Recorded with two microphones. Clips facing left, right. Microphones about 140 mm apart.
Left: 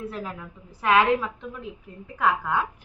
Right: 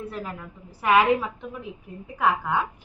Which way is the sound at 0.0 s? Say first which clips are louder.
Even; centre (ahead or behind).